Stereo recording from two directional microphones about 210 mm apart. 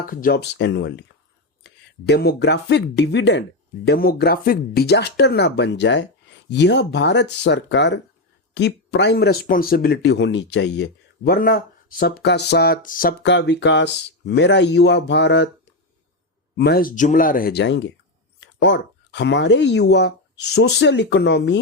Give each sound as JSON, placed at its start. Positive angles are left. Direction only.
{"t": 0.0, "sound": "speech", "side_deg": 40}
{"t": 11.3, "sound": "speech", "side_deg": 45}
{"t": 13.2, "sound": "speech", "side_deg": 55}
{"t": 16.6, "sound": "speech", "side_deg": 45}